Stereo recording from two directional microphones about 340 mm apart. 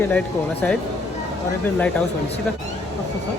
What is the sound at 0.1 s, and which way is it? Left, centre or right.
Speech, centre.